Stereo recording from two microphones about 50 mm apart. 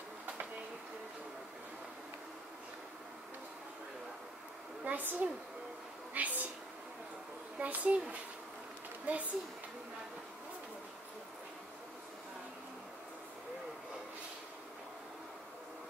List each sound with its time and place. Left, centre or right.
4.8 s a woman's voice: right
6.1 s a sound: right
7.5 s a child's voice: right